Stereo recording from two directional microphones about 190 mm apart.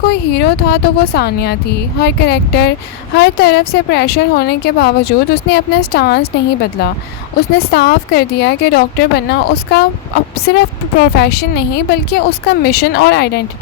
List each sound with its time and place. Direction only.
0.1 s a woman's voice: 60° left (ahead or behind)